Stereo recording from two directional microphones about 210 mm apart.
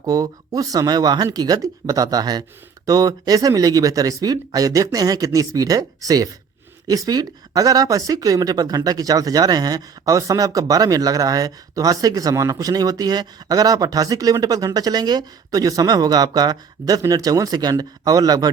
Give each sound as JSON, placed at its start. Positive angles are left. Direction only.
{"t": 0.0, "sound": "speech", "side_deg": -15}